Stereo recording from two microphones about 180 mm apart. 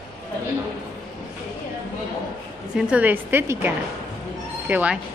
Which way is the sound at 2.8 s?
5° right (ahead or behind).